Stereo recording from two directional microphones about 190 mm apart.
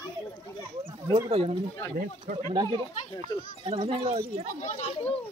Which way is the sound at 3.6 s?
30° right (ahead or behind).